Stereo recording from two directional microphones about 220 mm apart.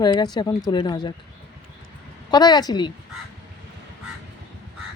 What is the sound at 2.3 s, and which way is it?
Speech, 20° left (ahead or behind).